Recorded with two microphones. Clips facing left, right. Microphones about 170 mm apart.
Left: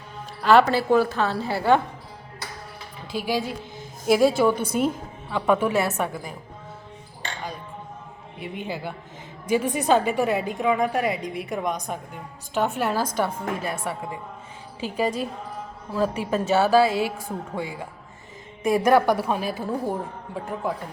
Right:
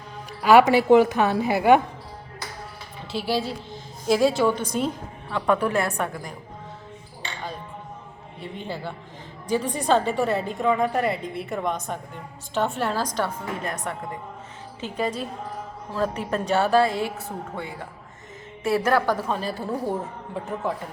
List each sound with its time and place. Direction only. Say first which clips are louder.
0.7 s a woman's voice: right 4 dB; 15° right (ahead or behind)
3.1 s a woman's voice: even; 15° left (ahead or behind)
8.4 s a woman's voice: left 1 dB; 10° left (ahead or behind)
19.6 s a woman's voice: even; centre (ahead or behind)